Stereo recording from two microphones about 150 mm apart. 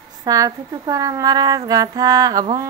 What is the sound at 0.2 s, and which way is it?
Mantra, 25° right (ahead or behind).